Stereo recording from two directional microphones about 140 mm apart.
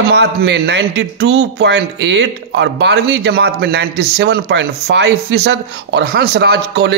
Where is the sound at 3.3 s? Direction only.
90° right.